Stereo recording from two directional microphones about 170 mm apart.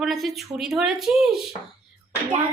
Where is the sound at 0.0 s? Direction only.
Centre (ahead or behind).